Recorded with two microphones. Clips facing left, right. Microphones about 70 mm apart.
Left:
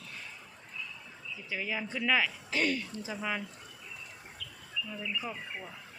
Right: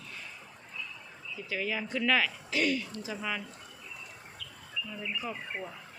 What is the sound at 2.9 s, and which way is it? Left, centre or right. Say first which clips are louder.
Speech: even; left.